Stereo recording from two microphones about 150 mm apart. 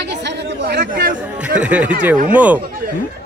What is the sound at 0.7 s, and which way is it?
Speech, 90° right.